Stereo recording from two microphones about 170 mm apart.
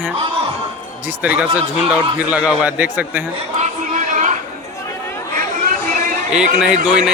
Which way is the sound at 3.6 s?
45° right (ahead or behind).